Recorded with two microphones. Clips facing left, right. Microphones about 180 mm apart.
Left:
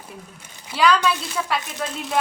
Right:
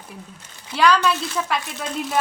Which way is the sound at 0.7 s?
Centre (ahead or behind).